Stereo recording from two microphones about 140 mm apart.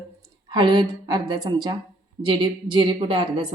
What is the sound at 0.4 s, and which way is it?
A woman's voice, 35° right (ahead or behind).